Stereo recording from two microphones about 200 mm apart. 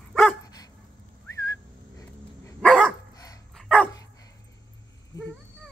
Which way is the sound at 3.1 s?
20° left (ahead or behind).